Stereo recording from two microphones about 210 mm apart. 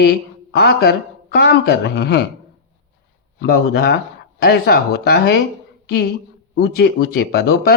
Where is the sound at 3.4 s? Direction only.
50° left (ahead or behind).